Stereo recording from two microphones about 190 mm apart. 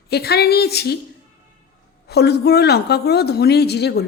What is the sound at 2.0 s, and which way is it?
Speech, 60° left (ahead or behind).